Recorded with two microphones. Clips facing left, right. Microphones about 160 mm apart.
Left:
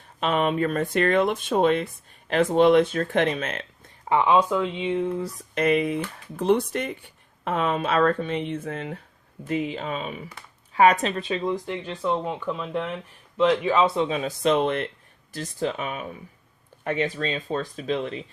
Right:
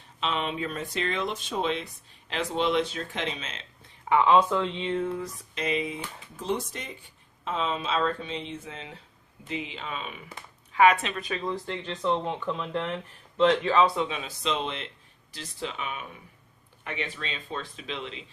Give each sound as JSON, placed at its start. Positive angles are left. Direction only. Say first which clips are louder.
{"t": 0.2, "sound": "speech", "louder": "left 7 dB", "side_deg": 50}
{"t": 4.2, "sound": "speech", "louder": "left 1 dB", "side_deg": 10}
{"t": 5.5, "sound": "speech", "louder": "left 8 dB", "side_deg": 60}
{"t": 13.8, "sound": "speech", "louder": "left 4 dB", "side_deg": 30}
{"t": 14.2, "sound": "speech", "louder": "left 9 dB", "side_deg": 50}